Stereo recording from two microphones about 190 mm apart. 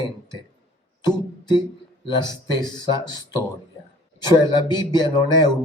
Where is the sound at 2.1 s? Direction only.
20° left (ahead or behind).